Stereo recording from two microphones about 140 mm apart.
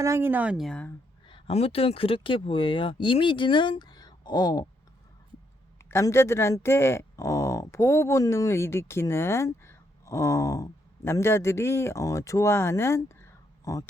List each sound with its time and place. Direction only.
0.0 s a woman's voice: 20° right (ahead or behind)
0.5 s speech: 5° left (ahead or behind)
1.3 s speech: 45° left (ahead or behind); by 4.6 s 30° left (ahead or behind)
5.9 s speech: 20° left (ahead or behind)